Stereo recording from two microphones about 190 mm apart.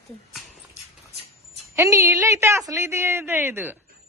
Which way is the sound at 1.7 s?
15° right (ahead or behind).